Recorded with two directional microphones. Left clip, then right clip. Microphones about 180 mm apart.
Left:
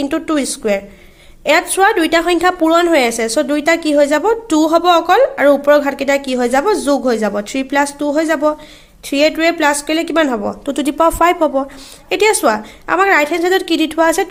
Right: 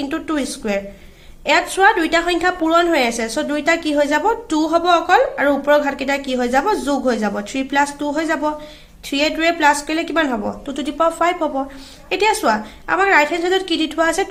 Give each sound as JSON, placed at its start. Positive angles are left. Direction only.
{"t": 0.0, "sound": "a woman's voice", "side_deg": 35}